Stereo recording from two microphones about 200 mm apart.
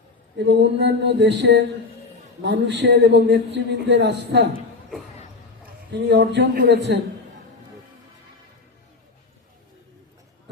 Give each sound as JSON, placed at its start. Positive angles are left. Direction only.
{"t": 0.3, "sound": "a man's voice", "side_deg": -60}
{"t": 5.9, "sound": "a man's voice", "side_deg": -60}